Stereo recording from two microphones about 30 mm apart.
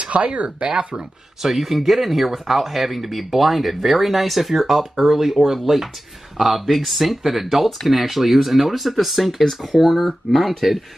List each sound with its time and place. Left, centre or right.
0.0 s speech: right
1.4 s speech: centre